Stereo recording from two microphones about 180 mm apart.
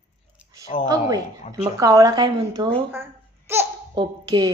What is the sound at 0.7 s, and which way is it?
Speech, 40° left (ahead or behind).